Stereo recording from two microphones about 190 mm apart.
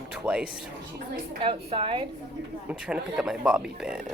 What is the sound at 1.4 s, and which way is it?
Speech, 30° right (ahead or behind).